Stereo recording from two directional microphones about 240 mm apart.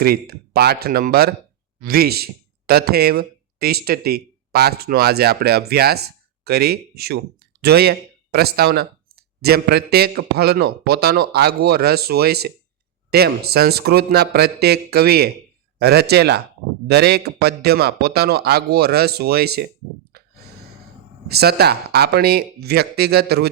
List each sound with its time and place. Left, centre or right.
0.0 s speech: right
20.1 s sigh: right
21.2 s speech: right